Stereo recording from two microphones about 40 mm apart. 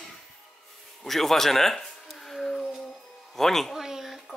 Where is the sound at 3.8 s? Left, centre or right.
Centre.